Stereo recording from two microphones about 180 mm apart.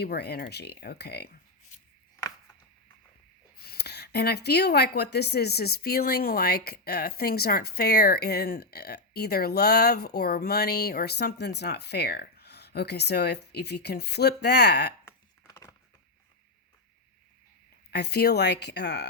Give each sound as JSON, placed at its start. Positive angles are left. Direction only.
{"t": 0.0, "sound": "speech", "side_deg": 65}
{"t": 3.6, "sound": "speech", "side_deg": 65}
{"t": 15.0, "sound": "a sound", "side_deg": 15}
{"t": 17.9, "sound": "speech", "side_deg": 65}